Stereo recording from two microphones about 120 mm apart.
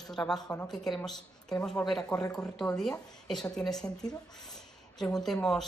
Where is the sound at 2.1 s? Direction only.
30° left (ahead or behind).